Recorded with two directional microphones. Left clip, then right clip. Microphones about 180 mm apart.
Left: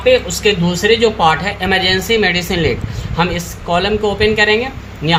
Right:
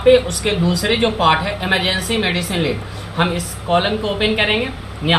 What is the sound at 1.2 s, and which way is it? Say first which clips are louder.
Speech: left 2 dB; 70° left (ahead or behind).